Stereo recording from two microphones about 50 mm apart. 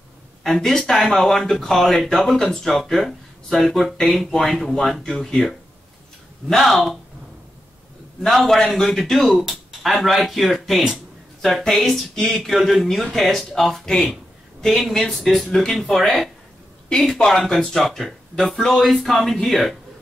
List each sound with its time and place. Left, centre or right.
0.4 s speech: centre
8.3 s speech: centre
18.3 s speech: centre